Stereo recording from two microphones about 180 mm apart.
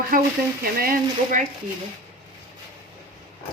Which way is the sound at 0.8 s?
50° right (ahead or behind).